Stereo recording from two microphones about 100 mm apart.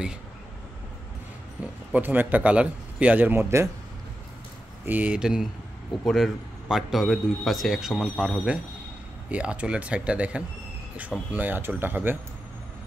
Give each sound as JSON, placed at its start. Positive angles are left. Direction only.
{"t": 1.9, "sound": "speech", "side_deg": -15}
{"t": 4.8, "sound": "a man's voice", "side_deg": -15}
{"t": 9.3, "sound": "speech", "side_deg": -15}